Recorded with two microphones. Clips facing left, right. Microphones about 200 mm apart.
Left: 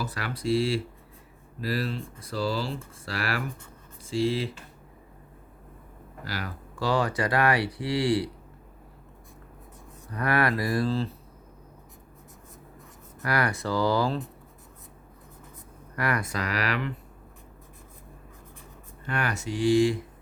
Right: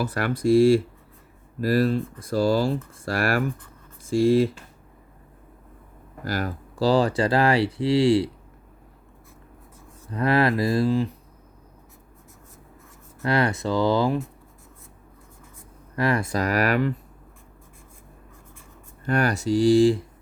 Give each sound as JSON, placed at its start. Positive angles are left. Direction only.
{"t": 0.0, "sound": "speech", "side_deg": -55}
{"t": 6.2, "sound": "speech", "side_deg": -45}
{"t": 6.7, "sound": "speech", "side_deg": -35}
{"t": 10.1, "sound": "speech", "side_deg": -25}
{"t": 13.2, "sound": "speech", "side_deg": -25}
{"t": 16.0, "sound": "speech", "side_deg": -25}
{"t": 16.4, "sound": "speech", "side_deg": -45}
{"t": 19.0, "sound": "speech", "side_deg": -40}